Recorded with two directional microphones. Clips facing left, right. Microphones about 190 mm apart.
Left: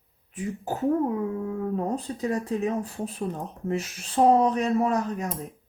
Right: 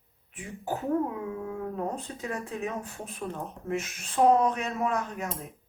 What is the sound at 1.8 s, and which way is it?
Speech, 35° left (ahead or behind).